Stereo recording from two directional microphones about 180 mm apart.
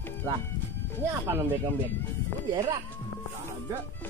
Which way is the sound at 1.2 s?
15° right (ahead or behind).